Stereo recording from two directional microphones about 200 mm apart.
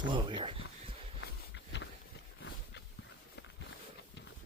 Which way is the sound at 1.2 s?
65° left (ahead or behind).